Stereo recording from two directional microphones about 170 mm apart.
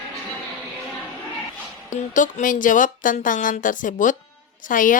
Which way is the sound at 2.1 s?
50° left (ahead or behind).